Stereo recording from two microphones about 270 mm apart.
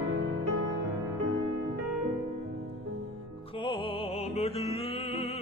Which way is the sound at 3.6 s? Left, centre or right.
Centre.